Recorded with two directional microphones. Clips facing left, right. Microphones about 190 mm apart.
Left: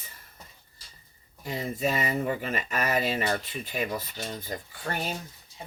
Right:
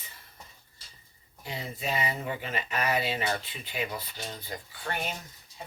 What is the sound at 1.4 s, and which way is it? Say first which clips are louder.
Speech: left 6 dB; 45° left (ahead or behind).